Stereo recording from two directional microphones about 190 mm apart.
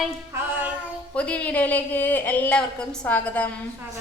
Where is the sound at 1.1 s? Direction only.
5° left (ahead or behind).